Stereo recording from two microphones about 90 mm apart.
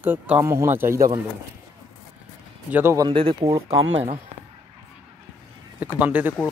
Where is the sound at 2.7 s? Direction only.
20° right (ahead or behind).